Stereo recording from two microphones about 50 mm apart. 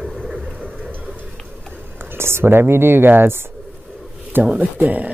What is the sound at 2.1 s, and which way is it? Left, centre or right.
Speech, right.